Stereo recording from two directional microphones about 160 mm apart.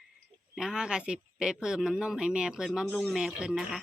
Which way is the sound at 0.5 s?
5° right (ahead or behind).